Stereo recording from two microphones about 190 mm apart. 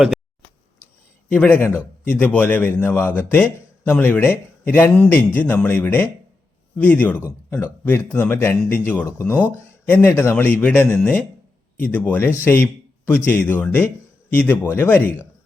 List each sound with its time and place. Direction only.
1.3 s a man's voice: 10° left (ahead or behind)